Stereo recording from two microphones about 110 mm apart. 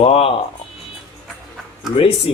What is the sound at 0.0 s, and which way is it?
Speech, 60° left (ahead or behind).